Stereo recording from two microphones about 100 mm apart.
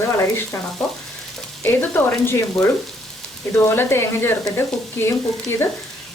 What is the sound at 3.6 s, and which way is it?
Speech, 25° left (ahead or behind).